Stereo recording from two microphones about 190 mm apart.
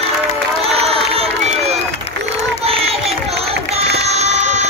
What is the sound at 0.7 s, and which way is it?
Crowd, 30° right (ahead or behind).